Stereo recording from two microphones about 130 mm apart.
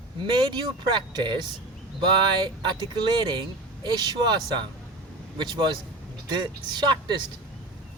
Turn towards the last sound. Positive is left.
turn(degrees=-35)  # may be behind; listen again after turning